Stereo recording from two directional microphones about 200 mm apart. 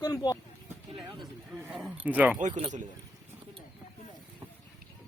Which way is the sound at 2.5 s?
20° right (ahead or behind).